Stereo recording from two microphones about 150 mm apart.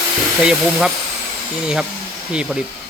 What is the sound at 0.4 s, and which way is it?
A man's voice, 5° right (ahead or behind).